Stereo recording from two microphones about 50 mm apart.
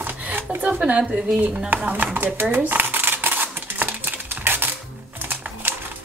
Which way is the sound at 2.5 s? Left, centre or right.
Right.